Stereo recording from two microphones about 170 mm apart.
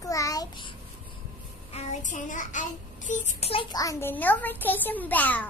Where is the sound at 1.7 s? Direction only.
40° left (ahead or behind).